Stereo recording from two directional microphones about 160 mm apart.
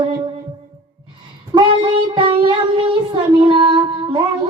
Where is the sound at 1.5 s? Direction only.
25° right (ahead or behind).